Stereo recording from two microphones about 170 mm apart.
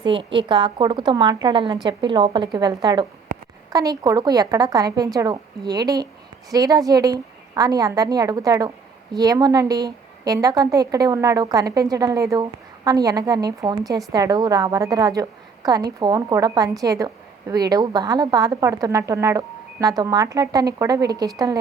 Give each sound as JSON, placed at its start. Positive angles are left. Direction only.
{"t": 0.0, "sound": "a woman's voice", "side_deg": -30}